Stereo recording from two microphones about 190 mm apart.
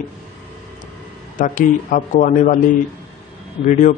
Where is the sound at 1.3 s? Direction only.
45° left (ahead or behind).